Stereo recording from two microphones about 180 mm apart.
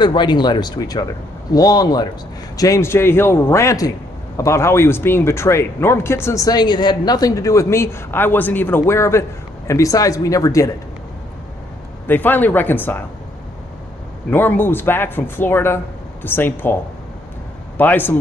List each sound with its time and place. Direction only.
0.0 s speech: 25° left (ahead or behind)
12.1 s speech: 10° left (ahead or behind)
14.3 s speech: 10° left (ahead or behind)
17.7 s speech: 10° left (ahead or behind)